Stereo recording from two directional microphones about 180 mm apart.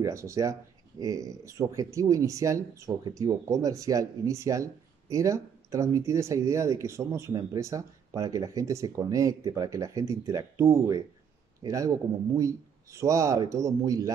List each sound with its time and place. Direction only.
0.0 s speech: 15° right (ahead or behind)